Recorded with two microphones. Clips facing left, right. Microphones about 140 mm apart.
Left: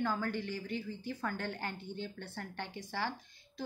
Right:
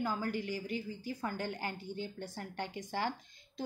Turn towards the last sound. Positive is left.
turn(degrees=-50)  # may be behind; listen again after turning